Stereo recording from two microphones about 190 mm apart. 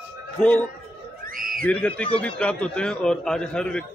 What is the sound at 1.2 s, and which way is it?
Speech, 45° right (ahead or behind).